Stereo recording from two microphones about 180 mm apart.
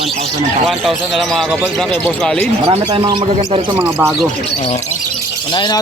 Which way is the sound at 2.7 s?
25° right (ahead or behind).